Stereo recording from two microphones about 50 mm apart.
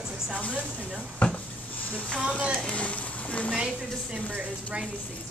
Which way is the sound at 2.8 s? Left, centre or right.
Left.